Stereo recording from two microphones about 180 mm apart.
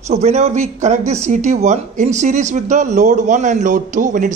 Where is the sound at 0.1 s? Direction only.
40° right (ahead or behind).